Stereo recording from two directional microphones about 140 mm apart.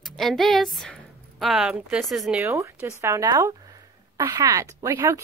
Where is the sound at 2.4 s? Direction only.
20° right (ahead or behind).